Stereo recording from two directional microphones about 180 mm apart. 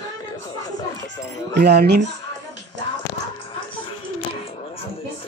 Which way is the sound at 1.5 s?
65° right (ahead or behind).